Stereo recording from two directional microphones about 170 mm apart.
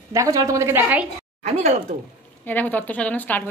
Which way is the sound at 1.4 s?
40° right (ahead or behind).